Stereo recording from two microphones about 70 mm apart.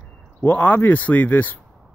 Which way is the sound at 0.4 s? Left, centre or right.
Left.